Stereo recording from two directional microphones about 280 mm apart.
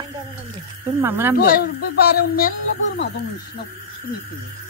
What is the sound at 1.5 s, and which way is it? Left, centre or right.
Speech, left.